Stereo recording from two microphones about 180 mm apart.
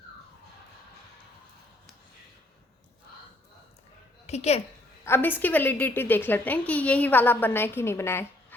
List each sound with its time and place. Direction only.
4.3 s a woman's voice: 35° left (ahead or behind)
5.0 s a woman's voice: 10° left (ahead or behind)